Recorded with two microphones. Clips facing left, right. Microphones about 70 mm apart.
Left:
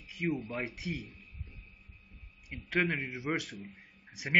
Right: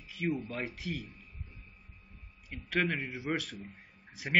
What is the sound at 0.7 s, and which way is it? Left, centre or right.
Speech, centre.